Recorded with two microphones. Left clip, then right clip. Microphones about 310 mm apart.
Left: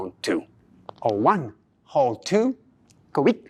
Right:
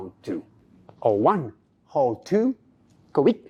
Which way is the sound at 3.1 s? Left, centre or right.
Left.